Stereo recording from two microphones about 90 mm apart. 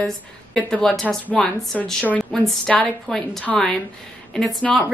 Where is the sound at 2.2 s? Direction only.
Centre (ahead or behind).